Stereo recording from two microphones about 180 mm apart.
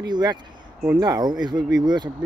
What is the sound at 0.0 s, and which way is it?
Speech, 20° right (ahead or behind).